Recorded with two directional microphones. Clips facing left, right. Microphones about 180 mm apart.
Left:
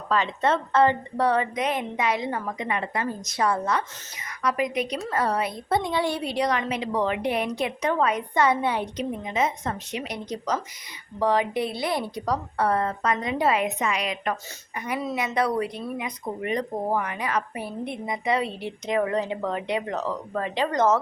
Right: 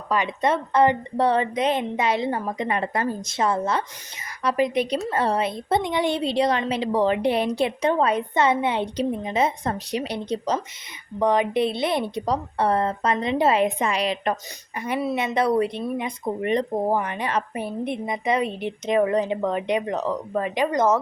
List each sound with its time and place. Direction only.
0.1 s speech: 15° right (ahead or behind); by 3.1 s 40° right (ahead or behind)
3.2 s speech: 25° right (ahead or behind)